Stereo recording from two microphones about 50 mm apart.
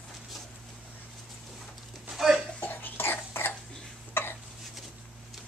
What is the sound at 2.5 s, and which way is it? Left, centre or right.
Cough, left.